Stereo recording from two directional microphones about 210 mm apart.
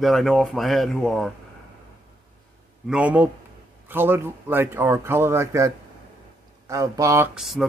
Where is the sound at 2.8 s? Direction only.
5° right (ahead or behind).